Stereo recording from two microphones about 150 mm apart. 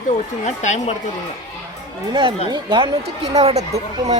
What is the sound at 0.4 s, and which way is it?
Speech, 50° left (ahead or behind).